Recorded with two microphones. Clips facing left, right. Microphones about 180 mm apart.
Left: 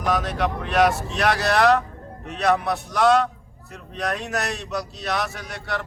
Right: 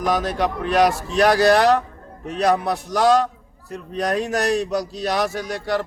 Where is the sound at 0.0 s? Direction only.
40° right (ahead or behind).